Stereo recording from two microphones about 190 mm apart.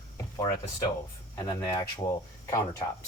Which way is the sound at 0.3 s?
15° left (ahead or behind).